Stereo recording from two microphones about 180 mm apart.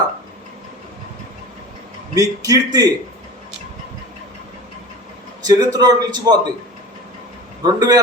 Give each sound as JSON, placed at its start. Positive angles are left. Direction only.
{"t": 2.1, "sound": "a man's voice", "side_deg": -20}
{"t": 5.5, "sound": "a man's voice", "side_deg": -20}
{"t": 7.6, "sound": "a man's voice", "side_deg": -20}